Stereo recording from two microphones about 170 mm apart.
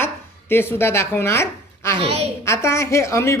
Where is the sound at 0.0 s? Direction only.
15° left (ahead or behind).